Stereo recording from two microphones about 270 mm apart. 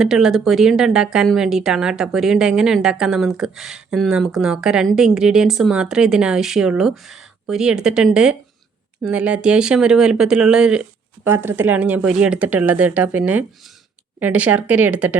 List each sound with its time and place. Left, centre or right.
0.0 s speech: centre